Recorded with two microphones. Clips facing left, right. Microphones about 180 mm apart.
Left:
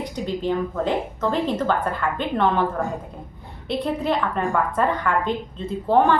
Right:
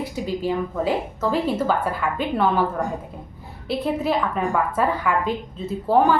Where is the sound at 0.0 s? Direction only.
5° right (ahead or behind).